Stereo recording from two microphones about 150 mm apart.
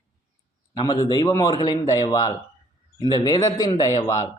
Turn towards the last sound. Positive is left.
turn(degrees=25)  # may be behind; listen again after turning